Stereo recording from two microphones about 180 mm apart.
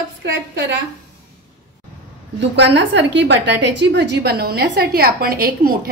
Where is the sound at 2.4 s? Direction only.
75° right (ahead or behind).